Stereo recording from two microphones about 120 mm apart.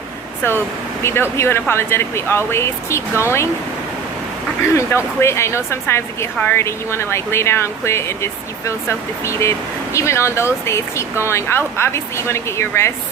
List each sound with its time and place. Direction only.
1.0 s speech: 20° left (ahead or behind)
4.7 s speech: 25° left (ahead or behind)